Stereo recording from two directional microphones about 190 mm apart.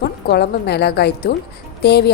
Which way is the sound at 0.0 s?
60° left (ahead or behind).